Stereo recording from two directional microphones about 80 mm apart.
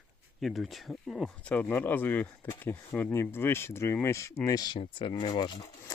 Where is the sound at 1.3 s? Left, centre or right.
Centre; by 4.5 s left.